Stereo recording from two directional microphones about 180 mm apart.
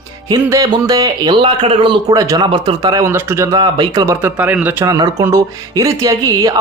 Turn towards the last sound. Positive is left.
turn(degrees=-20)  # may be behind; listen again after turning